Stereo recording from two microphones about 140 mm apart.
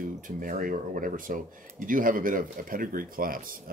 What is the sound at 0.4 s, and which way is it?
Speech, 80° right.